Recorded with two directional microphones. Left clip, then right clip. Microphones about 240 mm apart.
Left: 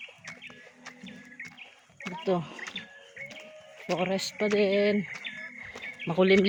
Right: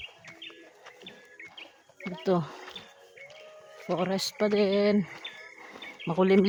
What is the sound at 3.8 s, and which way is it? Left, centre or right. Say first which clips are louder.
Speech: even; right.